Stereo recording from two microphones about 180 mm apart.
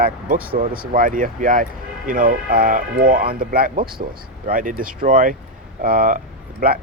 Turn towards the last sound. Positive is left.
turn(degrees=-50)  # may be behind; listen again after turning